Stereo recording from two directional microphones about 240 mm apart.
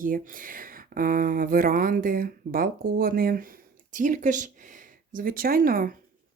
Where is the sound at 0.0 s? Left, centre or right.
Right.